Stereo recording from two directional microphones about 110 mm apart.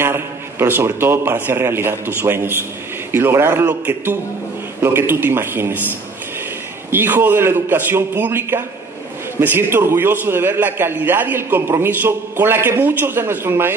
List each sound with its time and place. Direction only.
0.0 s a man's voice: 20° right (ahead or behind)
6.9 s a man's voice: 20° right (ahead or behind)